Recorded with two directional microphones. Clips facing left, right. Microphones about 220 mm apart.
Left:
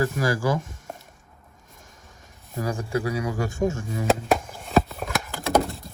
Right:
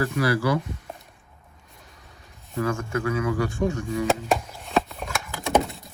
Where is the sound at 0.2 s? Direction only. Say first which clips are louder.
Right 1 dB; 45° left (ahead or behind).